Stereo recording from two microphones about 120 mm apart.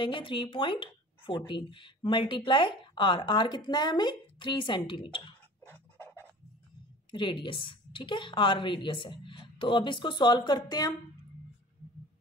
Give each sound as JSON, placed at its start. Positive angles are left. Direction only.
{"t": 0.0, "sound": "speech", "side_deg": 45}
{"t": 5.7, "sound": "pant", "side_deg": 15}
{"t": 7.1, "sound": "speech", "side_deg": 40}